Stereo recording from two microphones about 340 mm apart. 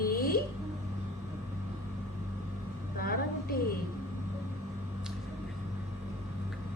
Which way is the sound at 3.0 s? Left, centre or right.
Left.